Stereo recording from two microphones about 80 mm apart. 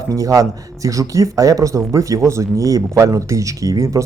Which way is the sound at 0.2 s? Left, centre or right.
Right.